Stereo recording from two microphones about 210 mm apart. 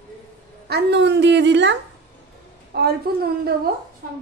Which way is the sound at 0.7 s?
55° right (ahead or behind).